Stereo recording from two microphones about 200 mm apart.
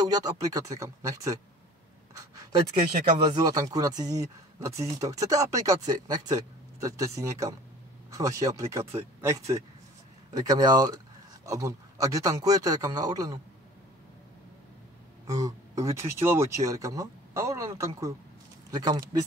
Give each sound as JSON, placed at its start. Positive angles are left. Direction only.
{"t": 0.1, "sound": "speech", "side_deg": -20}
{"t": 15.2, "sound": "speech", "side_deg": -15}